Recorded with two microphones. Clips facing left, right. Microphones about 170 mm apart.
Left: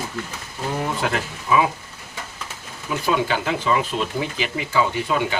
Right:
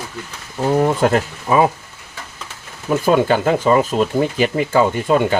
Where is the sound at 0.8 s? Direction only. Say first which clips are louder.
Right 9 dB; 45° right (ahead or behind).